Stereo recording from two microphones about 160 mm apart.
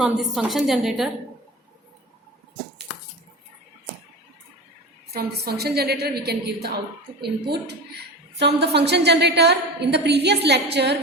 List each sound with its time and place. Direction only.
0.0 s a woman's voice: centre (ahead or behind)
5.1 s a woman's voice: 80° right